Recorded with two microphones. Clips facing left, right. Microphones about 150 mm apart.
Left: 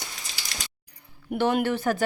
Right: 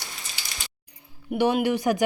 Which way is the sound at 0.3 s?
90° left.